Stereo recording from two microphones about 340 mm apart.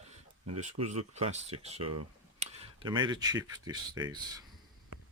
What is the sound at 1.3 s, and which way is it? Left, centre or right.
Speech, centre.